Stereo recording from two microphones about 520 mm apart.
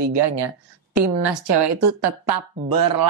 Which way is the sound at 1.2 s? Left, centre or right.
Right.